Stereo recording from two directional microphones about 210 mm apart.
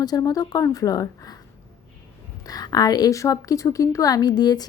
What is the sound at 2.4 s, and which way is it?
A woman's voice, 20° left (ahead or behind).